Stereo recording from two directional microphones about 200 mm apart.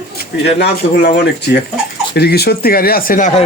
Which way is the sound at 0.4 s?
60° left (ahead or behind).